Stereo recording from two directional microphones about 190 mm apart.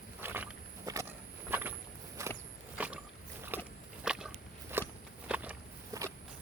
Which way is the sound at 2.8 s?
10° right (ahead or behind).